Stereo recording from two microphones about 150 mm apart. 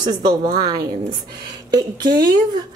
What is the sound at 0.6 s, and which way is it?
Speech, 25° right (ahead or behind).